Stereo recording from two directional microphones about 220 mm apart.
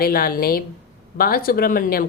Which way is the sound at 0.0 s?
40° left (ahead or behind).